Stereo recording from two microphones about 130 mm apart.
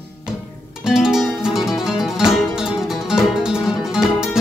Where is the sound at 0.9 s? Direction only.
5° right (ahead or behind).